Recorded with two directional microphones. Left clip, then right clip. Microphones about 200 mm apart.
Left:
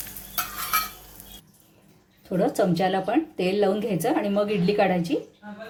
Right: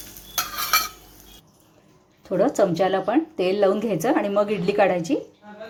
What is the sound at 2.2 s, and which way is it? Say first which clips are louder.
Speech: right 3 dB; 10° right (ahead or behind).